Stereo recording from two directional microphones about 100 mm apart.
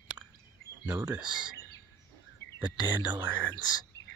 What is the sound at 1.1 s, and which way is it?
Speech, 10° right (ahead or behind).